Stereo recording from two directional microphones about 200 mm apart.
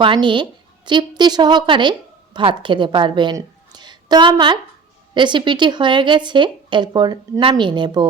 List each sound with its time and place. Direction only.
0.0 s a woman's voice: 25° right (ahead or behind)